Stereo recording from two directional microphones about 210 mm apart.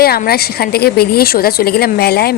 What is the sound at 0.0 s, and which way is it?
A woman's voice, 45° left (ahead or behind).